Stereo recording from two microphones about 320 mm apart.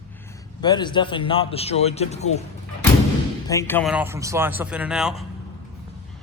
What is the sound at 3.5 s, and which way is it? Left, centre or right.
Speech, centre.